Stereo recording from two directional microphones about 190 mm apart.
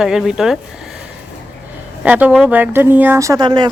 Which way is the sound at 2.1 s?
5° right (ahead or behind).